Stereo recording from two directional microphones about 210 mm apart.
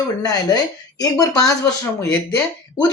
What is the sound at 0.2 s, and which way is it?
Speech, 20° left (ahead or behind).